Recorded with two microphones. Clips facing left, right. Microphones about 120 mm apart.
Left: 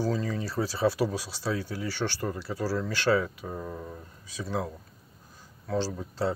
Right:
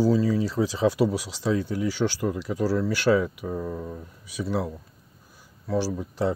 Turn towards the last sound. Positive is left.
turn(degrees=-15)  # may be behind; listen again after turning